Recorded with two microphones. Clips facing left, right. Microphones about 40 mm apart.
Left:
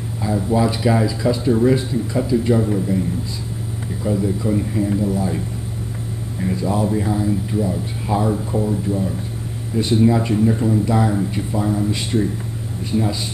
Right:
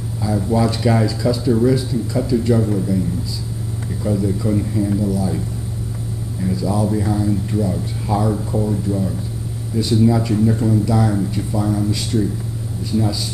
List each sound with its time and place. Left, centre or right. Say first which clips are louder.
0.4 s speech: even; centre
1.2 s speech: even; left
4.0 s speech: even; centre
6.4 s speech: even; left
6.9 s speech: even; centre
8.1 s speech: even; left
9.8 s speech: even; left